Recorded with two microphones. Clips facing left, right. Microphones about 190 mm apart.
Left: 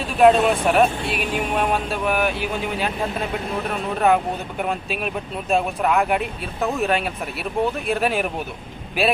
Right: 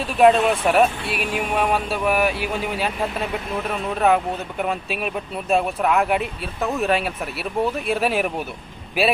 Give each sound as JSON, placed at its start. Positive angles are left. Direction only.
{"t": 0.2, "sound": "speech", "side_deg": 0}